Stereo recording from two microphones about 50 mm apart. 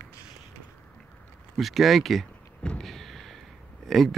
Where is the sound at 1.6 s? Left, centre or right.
Centre.